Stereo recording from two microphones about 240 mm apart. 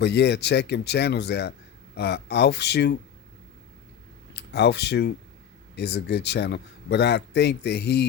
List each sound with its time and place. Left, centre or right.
0.0 s a man's voice: left
4.4 s a man's voice: left